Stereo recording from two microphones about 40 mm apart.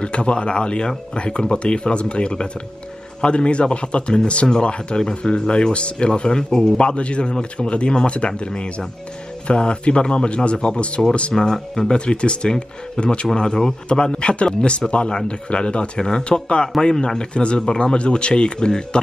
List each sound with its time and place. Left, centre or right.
0.0 s speech: left
11.0 s speech: centre
11.9 s speech: left